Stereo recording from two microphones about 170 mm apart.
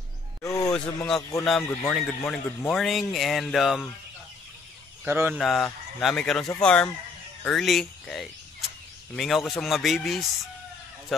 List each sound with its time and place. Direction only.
0.4 s speech: 20° left (ahead or behind)
0.7 s speech: 5° left (ahead or behind)
5.0 s speech: 15° right (ahead or behind)
5.3 s speech: centre (ahead or behind)